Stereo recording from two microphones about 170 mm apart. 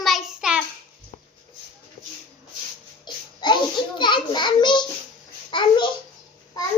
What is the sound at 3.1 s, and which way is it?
Babbling, 25° left (ahead or behind).